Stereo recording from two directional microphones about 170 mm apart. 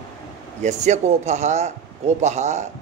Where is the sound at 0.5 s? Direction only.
45° right (ahead or behind).